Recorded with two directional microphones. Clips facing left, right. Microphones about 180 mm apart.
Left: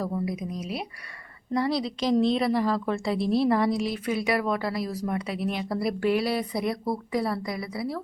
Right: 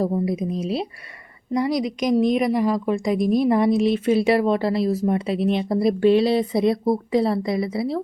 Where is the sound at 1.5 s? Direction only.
15° right (ahead or behind).